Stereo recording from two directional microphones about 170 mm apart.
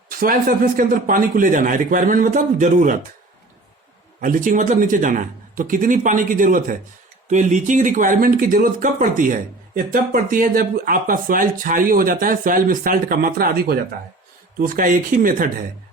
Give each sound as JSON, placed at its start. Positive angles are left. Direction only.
{"t": 0.1, "sound": "speech", "side_deg": -55}
{"t": 4.2, "sound": "speech", "side_deg": -50}